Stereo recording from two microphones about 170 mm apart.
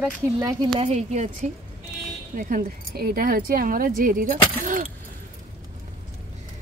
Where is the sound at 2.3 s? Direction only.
55° right (ahead or behind).